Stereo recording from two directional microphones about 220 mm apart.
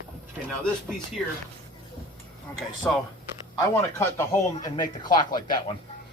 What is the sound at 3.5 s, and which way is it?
Speech, 10° left (ahead or behind).